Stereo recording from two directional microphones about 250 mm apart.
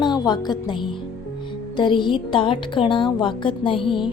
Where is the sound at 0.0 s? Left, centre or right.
Centre.